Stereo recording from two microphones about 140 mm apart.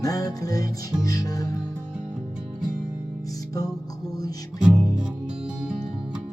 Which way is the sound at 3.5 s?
25° left (ahead or behind).